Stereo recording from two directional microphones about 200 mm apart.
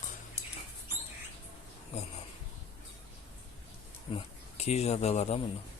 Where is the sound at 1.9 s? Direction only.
35° left (ahead or behind).